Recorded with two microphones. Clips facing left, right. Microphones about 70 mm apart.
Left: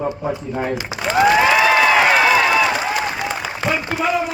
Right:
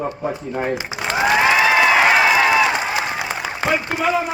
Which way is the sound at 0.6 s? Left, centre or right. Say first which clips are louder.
Right 1 dB; right.